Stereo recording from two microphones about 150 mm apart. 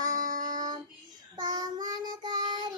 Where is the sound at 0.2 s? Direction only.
55° right (ahead or behind).